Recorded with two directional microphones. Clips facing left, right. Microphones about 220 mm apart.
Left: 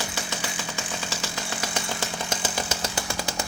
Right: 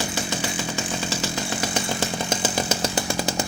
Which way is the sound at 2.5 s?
20° right (ahead or behind).